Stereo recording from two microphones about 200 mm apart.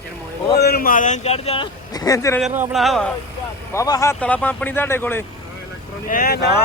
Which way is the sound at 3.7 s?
15° left (ahead or behind).